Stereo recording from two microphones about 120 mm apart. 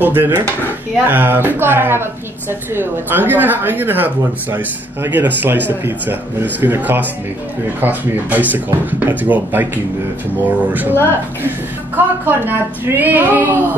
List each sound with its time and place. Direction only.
0.0 s speech: 15° right (ahead or behind)
12.3 s speech: 15° right (ahead or behind)